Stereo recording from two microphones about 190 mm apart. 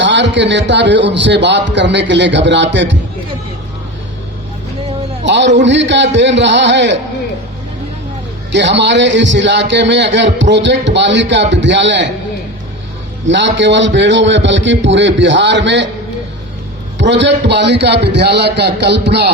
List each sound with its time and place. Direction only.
0.0 s a man's voice: 70° right (ahead or behind)
5.2 s a man's voice: 70° right (ahead or behind)
8.5 s a man's voice: 70° right (ahead or behind)
13.2 s a man's voice: 70° right (ahead or behind)
17.0 s a man's voice: 70° right (ahead or behind)